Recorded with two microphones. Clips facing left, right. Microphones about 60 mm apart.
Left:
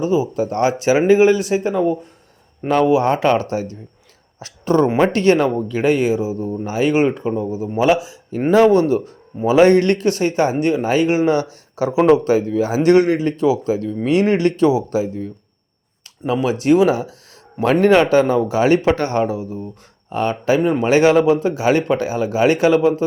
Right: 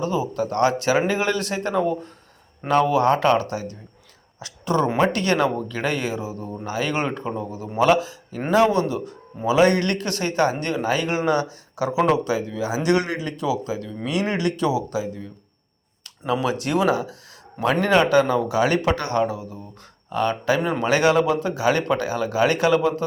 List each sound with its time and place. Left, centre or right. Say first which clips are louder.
0.0 s a man's voice: left 6 dB; centre
8.4 s a man's voice: left 6 dB; left
16.2 s a man's voice: left 5 dB; left
17.8 s a man's voice: left 4 dB; left